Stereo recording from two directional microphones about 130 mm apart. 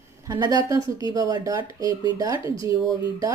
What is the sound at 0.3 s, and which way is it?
A woman's voice, 30° right (ahead or behind).